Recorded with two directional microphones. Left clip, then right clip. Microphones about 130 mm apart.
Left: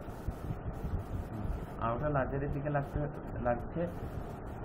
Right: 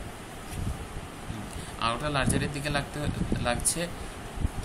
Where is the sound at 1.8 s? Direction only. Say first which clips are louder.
Right 5 dB; 50° right (ahead or behind).